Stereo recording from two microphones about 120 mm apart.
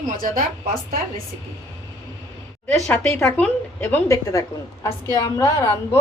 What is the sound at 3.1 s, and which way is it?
A woman's voice, 20° left (ahead or behind).